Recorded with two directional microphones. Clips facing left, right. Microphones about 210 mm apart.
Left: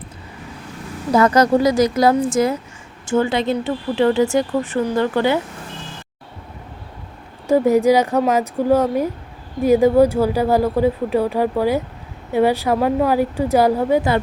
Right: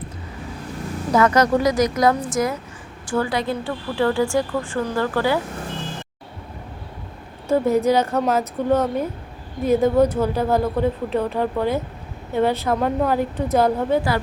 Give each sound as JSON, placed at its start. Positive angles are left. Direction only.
{"t": 1.1, "sound": "speech", "side_deg": 30}
{"t": 7.4, "sound": "speech", "side_deg": 15}